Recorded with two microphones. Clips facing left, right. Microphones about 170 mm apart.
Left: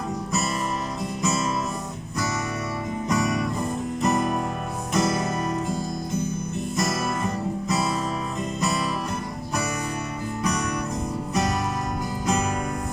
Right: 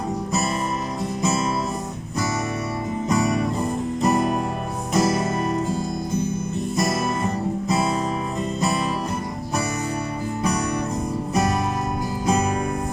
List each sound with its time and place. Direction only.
3.1 s music: 30° right (ahead or behind)
12.2 s music: 30° right (ahead or behind)